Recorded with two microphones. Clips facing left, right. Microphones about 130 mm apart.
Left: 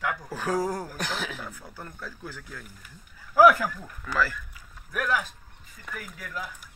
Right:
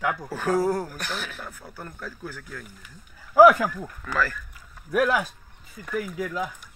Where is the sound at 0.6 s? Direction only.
15° left (ahead or behind).